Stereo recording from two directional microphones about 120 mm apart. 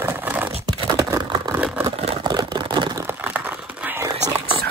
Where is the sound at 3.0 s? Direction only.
15° right (ahead or behind).